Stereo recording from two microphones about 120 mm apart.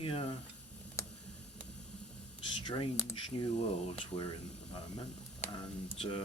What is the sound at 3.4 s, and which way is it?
Speech, 50° left (ahead or behind).